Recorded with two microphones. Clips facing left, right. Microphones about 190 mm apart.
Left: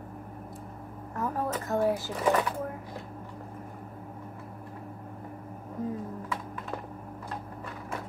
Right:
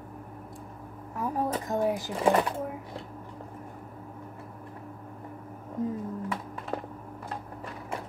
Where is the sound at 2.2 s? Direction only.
30° right (ahead or behind).